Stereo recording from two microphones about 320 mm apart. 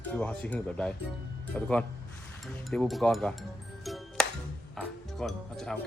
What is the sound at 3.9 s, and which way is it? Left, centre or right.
Music, centre.